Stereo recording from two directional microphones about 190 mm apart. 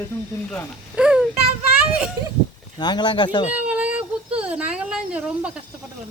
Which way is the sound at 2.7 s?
20° left (ahead or behind).